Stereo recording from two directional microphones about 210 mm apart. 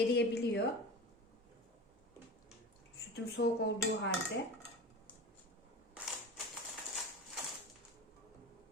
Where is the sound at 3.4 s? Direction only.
50° left (ahead or behind).